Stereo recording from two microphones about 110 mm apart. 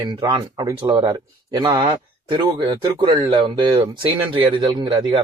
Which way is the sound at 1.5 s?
35° right (ahead or behind).